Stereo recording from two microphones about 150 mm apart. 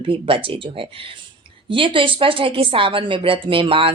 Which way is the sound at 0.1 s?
35° right (ahead or behind).